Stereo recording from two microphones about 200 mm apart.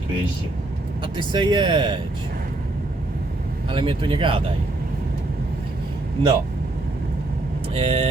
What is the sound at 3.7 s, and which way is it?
Speech, 25° right (ahead or behind).